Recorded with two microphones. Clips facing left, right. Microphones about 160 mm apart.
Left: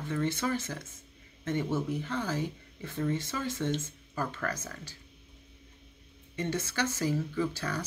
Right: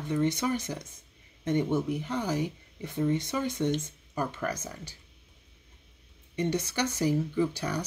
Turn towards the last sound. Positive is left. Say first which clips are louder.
# right 3 dB
turn(degrees=-15)  # may be behind; listen again after turning